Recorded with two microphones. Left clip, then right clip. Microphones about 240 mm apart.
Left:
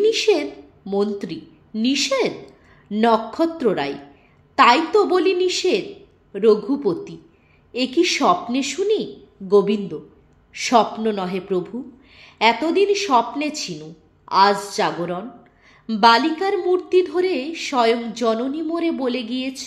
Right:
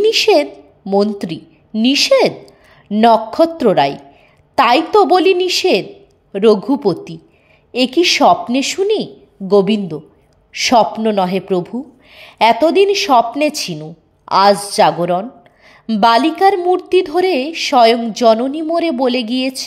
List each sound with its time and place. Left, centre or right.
0.0 s a woman's voice: right